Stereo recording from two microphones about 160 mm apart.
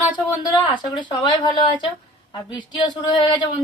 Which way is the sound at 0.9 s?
30° left (ahead or behind).